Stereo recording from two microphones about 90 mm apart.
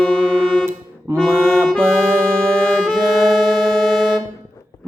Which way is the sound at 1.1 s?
30° right (ahead or behind).